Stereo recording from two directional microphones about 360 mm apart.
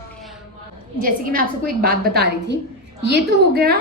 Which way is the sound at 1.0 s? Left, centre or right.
Right.